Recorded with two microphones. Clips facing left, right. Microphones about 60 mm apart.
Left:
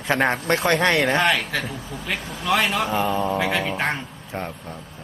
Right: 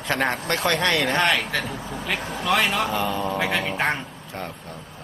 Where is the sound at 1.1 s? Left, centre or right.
Centre.